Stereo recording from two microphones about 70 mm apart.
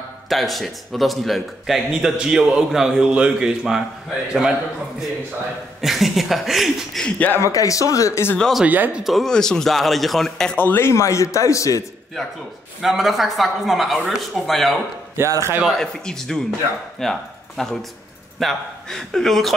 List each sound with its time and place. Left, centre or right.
0.3 s speech: centre
1.9 s a man's voice: centre
5.8 s speech: centre
7.1 s a man's voice: left
7.3 s a man's voice: left
8.6 s speech: right
9.0 s speech: centre
10.6 s a man's voice: left
12.8 s speech: centre
15.1 s a man's voice: right
15.8 s speech: centre